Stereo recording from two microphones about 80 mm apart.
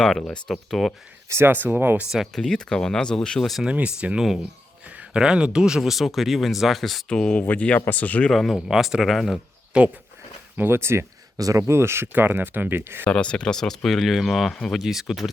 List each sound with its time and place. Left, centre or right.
0.0 s speech: centre
1.3 s speech: right
2.0 s speech: centre
3.6 s speech: centre
7.1 s speech: centre
8.3 s speech: centre
10.6 s speech: right
11.3 s speech: right
11.6 s speech: right
13.1 s speech: centre